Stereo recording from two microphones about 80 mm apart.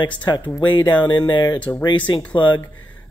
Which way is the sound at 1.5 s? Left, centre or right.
Centre.